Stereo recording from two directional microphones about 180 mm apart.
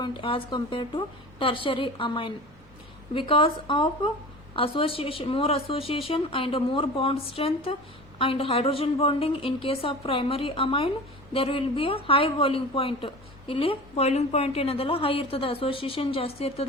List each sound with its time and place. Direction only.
0.0 s a woman's voice: 25° left (ahead or behind)